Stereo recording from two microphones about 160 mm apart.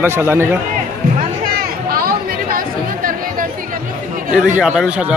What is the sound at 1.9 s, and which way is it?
Chatter, 65° right (ahead or behind).